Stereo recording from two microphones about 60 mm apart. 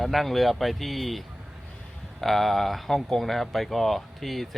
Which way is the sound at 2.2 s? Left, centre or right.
Centre.